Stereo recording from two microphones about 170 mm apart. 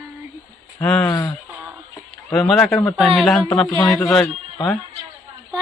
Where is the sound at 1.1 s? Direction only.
20° left (ahead or behind).